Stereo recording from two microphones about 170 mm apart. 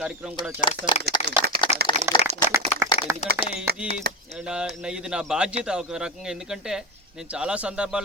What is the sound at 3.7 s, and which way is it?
Speech, 65° right (ahead or behind).